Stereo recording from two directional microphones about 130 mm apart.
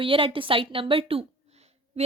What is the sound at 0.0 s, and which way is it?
A woman's voice, 45° right (ahead or behind).